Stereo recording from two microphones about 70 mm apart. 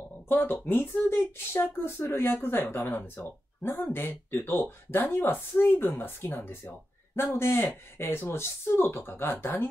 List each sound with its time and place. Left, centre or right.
0.3 s speech: left